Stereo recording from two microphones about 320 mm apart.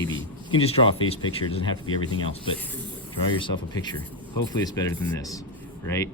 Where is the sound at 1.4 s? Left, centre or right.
Centre.